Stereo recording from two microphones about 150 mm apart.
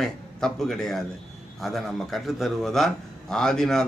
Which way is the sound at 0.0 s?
5° left (ahead or behind).